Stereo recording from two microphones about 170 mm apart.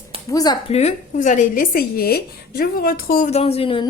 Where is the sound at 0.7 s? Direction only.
40° left (ahead or behind); by 3.3 s 60° left (ahead or behind).